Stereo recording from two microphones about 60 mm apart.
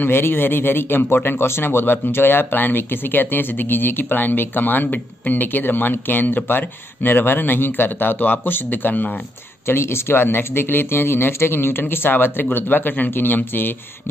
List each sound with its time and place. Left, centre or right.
0.0 s a man's voice: left
9.7 s a man's voice: left